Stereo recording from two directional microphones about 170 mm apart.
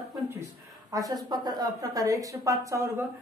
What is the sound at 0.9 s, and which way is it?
A woman's voice, 20° right (ahead or behind).